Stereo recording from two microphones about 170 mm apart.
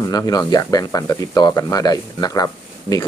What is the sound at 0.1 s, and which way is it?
Speech, 20° left (ahead or behind).